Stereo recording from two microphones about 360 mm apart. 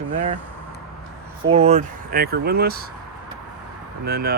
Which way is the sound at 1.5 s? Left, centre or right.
Centre.